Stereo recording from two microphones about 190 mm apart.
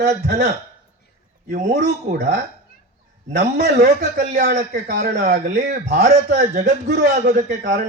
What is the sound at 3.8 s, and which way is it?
Speech, 40° right (ahead or behind).